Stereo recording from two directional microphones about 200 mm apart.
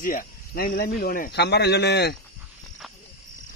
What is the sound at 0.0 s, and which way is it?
Speech, 45° left (ahead or behind).